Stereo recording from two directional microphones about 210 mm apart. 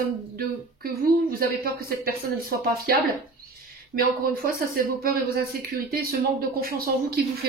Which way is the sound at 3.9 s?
45° right (ahead or behind).